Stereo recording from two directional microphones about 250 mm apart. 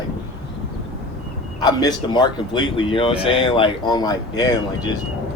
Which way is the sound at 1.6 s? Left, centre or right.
Centre.